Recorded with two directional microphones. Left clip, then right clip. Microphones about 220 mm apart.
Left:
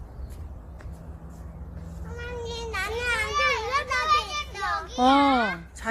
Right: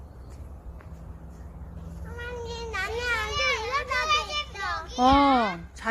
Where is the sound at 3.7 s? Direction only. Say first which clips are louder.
Left 1 dB; centre (ahead or behind).